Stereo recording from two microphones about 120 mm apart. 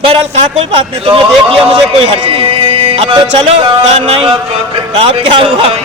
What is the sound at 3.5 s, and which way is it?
A man's voice, 60° right (ahead or behind).